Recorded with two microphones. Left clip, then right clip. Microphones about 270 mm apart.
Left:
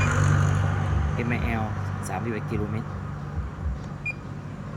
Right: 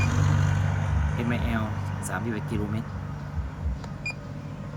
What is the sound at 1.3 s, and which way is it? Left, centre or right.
Speech, centre.